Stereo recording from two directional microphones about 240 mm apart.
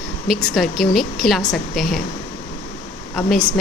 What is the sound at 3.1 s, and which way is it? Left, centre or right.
Speech, centre.